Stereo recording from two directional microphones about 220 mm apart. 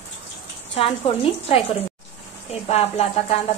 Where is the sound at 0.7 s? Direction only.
25° left (ahead or behind).